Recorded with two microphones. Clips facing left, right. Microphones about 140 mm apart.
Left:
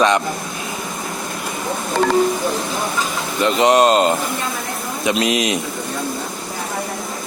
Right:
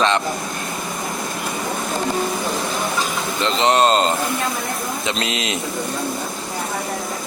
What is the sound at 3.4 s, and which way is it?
Speech, 10° left (ahead or behind).